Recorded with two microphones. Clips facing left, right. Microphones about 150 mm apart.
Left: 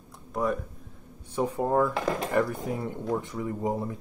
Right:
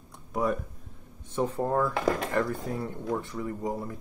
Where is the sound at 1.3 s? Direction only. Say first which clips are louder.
Left 2 dB; 10° left (ahead or behind).